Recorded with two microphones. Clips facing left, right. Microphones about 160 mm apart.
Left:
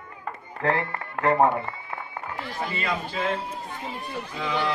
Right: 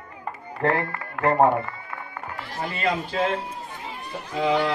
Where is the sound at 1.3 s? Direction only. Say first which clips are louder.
Right 2 dB; 35° right (ahead or behind).